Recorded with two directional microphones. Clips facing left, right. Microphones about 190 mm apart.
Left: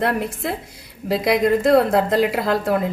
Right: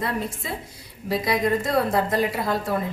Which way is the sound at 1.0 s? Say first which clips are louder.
Left 5 dB; 90° left.